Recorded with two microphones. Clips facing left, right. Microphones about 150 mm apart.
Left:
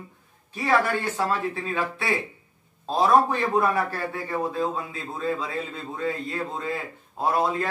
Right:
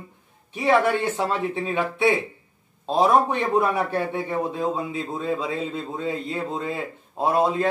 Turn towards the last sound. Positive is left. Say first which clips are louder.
# right 3 dB
turn(degrees=-25)  # may be behind; listen again after turning